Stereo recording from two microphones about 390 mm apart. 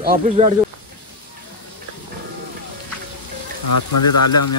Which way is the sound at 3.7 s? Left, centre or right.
Left.